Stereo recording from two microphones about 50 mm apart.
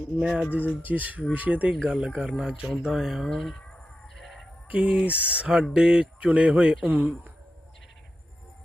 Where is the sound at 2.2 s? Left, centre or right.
Centre.